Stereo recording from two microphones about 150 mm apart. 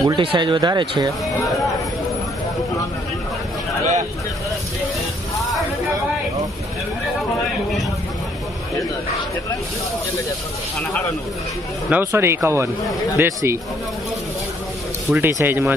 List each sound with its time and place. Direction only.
0.0 s speech: 30° right (ahead or behind)
10.8 s speech: 10° left (ahead or behind)
11.9 s speech: 15° right (ahead or behind)
15.0 s speech: 15° right (ahead or behind)